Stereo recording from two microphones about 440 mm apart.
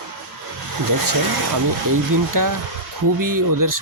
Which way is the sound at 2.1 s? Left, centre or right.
Right.